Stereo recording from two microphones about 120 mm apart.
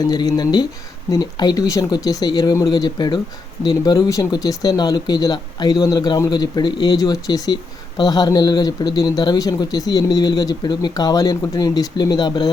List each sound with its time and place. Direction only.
0.0 s speech: 35° left (ahead or behind)